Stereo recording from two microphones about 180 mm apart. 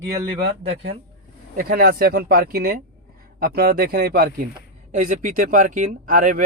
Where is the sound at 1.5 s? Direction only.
55° right (ahead or behind).